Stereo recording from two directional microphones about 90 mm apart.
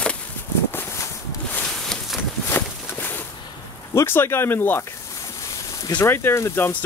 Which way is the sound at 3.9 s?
25° left (ahead or behind).